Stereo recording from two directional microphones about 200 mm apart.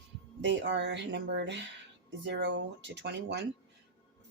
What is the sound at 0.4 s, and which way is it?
Speech, 60° right (ahead or behind).